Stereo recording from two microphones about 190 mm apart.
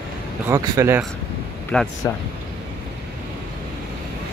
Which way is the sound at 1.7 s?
5° left (ahead or behind).